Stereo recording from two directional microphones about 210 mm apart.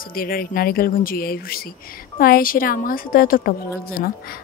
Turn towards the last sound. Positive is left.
turn(degrees=45)  # may be behind; listen again after turning